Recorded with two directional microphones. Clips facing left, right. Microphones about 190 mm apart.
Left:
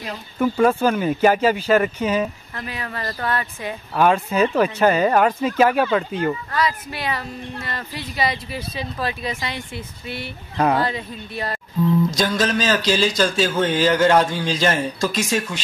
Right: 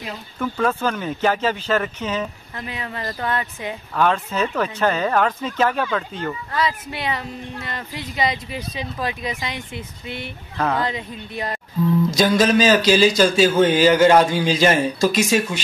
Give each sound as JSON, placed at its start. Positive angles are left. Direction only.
{"t": 0.4, "sound": "speech", "side_deg": 10}
{"t": 2.5, "sound": "speech", "side_deg": -20}
{"t": 3.9, "sound": "speech", "side_deg": 10}
{"t": 6.5, "sound": "speech", "side_deg": -20}
{"t": 12.1, "sound": "speech", "side_deg": -5}